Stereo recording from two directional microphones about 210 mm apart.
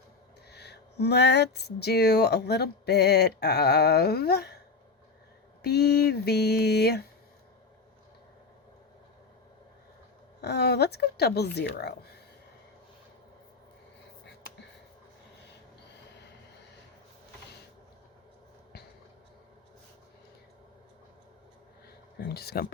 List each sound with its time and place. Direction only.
0.5 s speech: 50° left (ahead or behind)
5.6 s speech: 50° left (ahead or behind)
10.4 s speech: 50° left (ahead or behind)
22.2 s speech: 50° left (ahead or behind)